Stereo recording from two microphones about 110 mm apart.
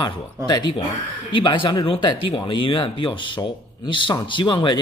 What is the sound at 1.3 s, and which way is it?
Speech, 50° left (ahead or behind).